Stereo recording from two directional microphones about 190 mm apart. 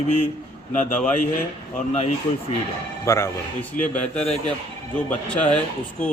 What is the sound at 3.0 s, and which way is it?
Speech, 15° left (ahead or behind).